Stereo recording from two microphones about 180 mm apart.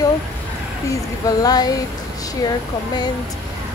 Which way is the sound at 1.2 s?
20° left (ahead or behind).